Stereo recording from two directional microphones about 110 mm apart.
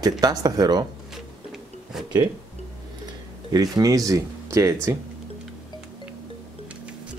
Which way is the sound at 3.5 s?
35° right (ahead or behind).